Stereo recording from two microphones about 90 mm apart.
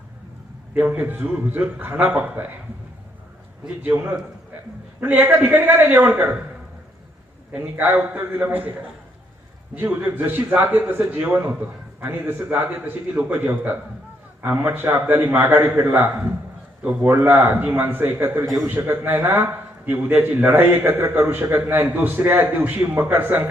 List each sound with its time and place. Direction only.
0.7 s a man's voice: 15° right (ahead or behind)
3.8 s a man's voice: 20° right (ahead or behind)
7.5 s a man's voice: 20° right (ahead or behind)
9.7 s a man's voice: 20° right (ahead or behind)